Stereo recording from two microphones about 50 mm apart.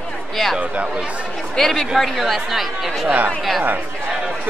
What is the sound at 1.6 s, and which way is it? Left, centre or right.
Speech, centre.